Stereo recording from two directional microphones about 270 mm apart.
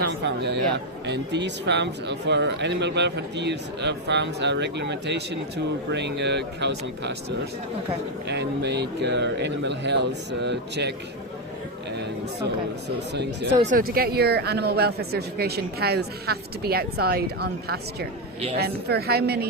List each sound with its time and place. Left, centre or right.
0.2 s speech: right
8.3 s speech: right
13.6 s speech: right